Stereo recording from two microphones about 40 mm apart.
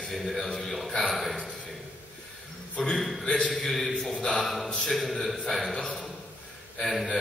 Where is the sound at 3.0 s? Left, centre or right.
Centre.